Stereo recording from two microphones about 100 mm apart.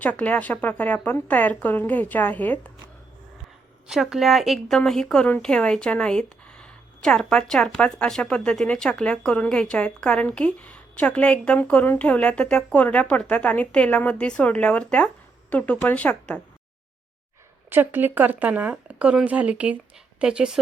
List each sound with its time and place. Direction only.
0.0 s speech: 15° left (ahead or behind)
3.8 s speech: 5° right (ahead or behind); by 16.4 s 15° left (ahead or behind)
17.7 s speech: 20° right (ahead or behind)